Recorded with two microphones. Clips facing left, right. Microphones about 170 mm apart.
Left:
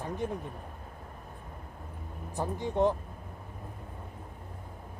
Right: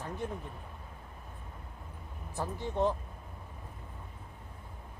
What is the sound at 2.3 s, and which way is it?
Speech, 15° left (ahead or behind).